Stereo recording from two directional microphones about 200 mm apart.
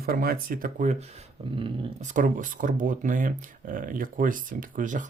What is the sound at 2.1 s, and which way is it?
Speech, 40° right (ahead or behind).